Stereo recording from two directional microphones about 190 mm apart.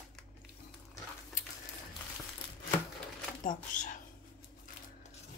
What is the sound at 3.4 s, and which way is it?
Speech, 45° left (ahead or behind).